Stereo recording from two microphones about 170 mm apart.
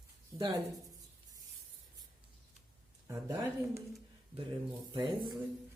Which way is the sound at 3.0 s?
15° right (ahead or behind).